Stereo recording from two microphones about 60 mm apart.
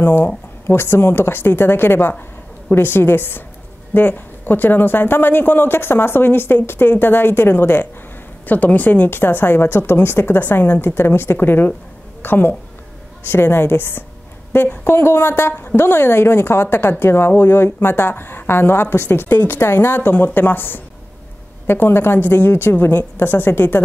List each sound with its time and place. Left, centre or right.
0.0 s a woman's voice: left